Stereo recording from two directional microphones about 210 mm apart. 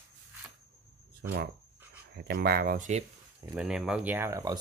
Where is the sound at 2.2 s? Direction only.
45° right (ahead or behind).